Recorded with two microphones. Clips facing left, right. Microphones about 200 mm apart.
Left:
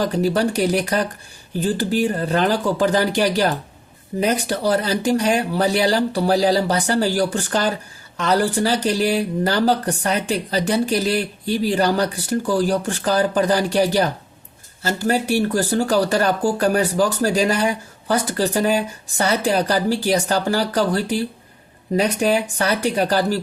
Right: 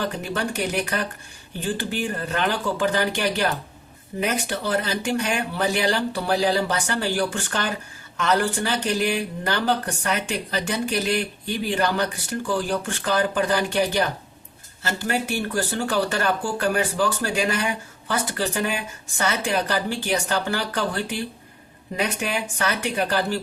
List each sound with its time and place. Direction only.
0.0 s speech: 35° left (ahead or behind)